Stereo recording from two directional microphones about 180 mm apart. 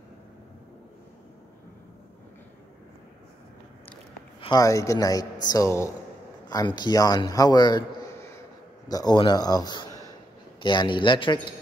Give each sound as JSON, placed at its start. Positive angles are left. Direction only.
{"t": 4.4, "sound": "a man's voice", "side_deg": 20}